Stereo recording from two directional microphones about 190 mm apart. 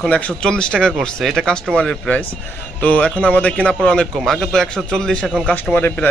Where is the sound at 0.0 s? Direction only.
5° left (ahead or behind).